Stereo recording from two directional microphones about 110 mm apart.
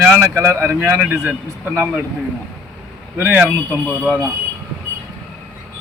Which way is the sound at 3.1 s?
20° right (ahead or behind).